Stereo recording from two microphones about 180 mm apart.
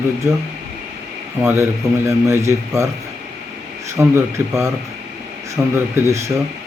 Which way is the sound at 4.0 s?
15° right (ahead or behind).